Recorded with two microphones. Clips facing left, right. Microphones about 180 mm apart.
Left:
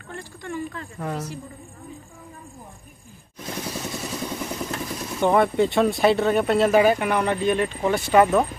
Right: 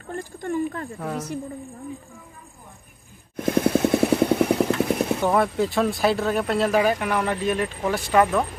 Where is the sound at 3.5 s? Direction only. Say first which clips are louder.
Right 12 dB; 55° right (ahead or behind).